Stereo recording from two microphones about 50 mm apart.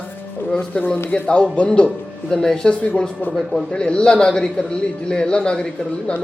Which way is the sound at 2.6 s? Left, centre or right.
Centre.